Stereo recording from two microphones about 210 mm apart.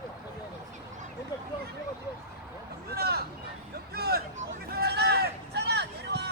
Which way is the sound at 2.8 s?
50° right (ahead or behind).